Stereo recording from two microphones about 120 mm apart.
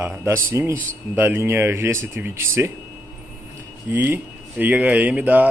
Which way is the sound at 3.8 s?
15° right (ahead or behind).